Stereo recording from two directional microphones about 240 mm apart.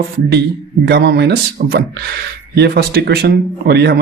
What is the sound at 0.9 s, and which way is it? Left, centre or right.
Speech, right.